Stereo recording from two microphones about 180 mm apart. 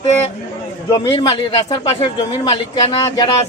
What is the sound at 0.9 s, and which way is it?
A man's voice, 25° left (ahead or behind).